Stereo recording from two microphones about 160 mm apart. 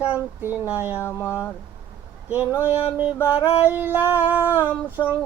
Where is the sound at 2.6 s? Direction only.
10° right (ahead or behind).